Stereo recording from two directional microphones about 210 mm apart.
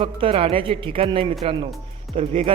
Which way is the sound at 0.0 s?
25° right (ahead or behind).